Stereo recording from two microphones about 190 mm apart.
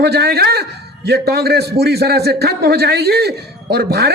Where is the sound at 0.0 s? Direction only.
60° right (ahead or behind).